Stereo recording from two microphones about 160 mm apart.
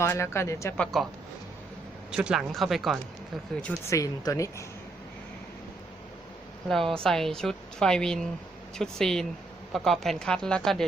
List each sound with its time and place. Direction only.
0.0 s speech: 15° left (ahead or behind)
0.8 s a woman's voice: centre (ahead or behind)
2.1 s a woman's voice: 5° right (ahead or behind)
3.8 s speech: 20° left (ahead or behind)
7.0 s a woman's voice: 5° left (ahead or behind)